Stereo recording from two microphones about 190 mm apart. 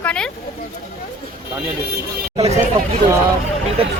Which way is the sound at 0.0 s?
5° left (ahead or behind).